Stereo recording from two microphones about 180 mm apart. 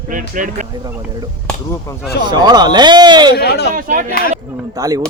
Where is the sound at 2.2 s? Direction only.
25° right (ahead or behind).